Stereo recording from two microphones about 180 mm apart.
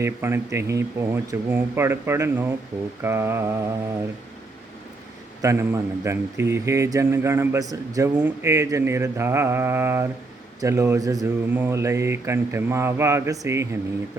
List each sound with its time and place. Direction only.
0.0 s speech: 15° right (ahead or behind)
5.4 s speech: 15° right (ahead or behind)